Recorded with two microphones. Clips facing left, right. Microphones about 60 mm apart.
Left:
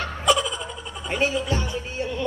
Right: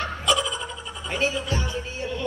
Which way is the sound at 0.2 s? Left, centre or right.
Left.